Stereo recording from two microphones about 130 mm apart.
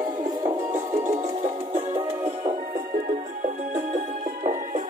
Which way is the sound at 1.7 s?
55° right (ahead or behind).